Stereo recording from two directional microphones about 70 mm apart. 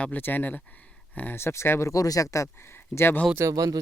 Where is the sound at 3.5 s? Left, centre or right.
Right.